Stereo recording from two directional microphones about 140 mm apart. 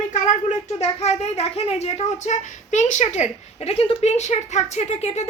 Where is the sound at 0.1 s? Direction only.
55° left (ahead or behind).